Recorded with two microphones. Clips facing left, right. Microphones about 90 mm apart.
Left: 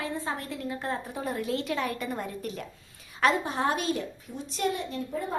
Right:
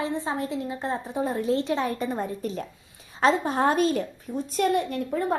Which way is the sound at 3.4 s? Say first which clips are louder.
Right 6 dB; 45° right (ahead or behind).